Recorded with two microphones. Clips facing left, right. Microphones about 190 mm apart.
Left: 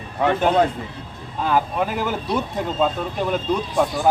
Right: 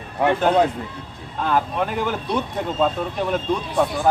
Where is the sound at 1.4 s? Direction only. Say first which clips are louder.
Left 1 dB; 5° left (ahead or behind).